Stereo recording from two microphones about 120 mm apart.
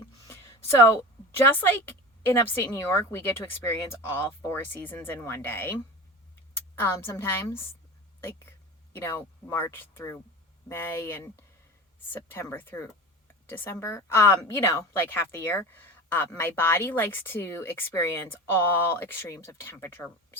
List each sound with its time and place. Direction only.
0.0 s a sound: 25° left (ahead or behind)
1.5 s a woman's voice: 20° left (ahead or behind)
6.7 s a woman's voice: 20° left (ahead or behind)